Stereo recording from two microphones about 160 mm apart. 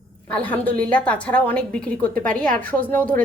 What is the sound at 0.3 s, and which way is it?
A woman's voice, 10° left (ahead or behind).